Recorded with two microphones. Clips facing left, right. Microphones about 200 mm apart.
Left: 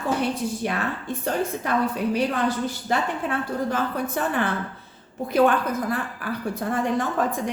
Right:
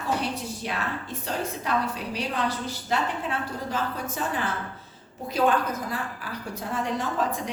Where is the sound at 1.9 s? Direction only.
55° left (ahead or behind).